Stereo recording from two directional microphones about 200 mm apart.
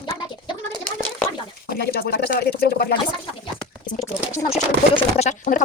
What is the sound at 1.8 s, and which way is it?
Speech, 50° left (ahead or behind).